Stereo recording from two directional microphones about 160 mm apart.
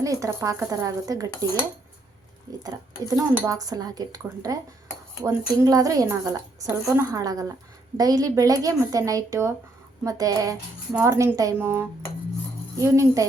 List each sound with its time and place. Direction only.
0.0 s a woman's voice: 20° right (ahead or behind)
2.5 s a woman's voice: 25° right (ahead or behind)